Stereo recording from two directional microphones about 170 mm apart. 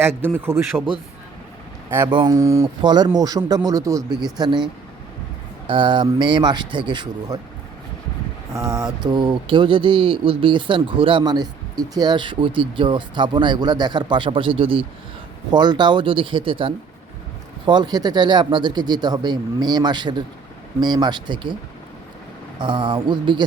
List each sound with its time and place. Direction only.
0.0 s a man's voice: 15° right (ahead or behind)
2.0 s speech: 25° right (ahead or behind)
5.6 s speech: 30° right (ahead or behind)
8.5 s speech: 20° right (ahead or behind)
22.6 s speech: 30° right (ahead or behind)